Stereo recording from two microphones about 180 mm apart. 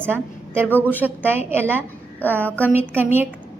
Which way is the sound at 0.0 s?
10° right (ahead or behind).